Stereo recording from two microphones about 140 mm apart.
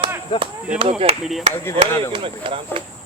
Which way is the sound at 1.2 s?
Centre (ahead or behind).